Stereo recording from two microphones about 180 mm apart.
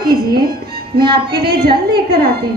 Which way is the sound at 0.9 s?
60° right (ahead or behind).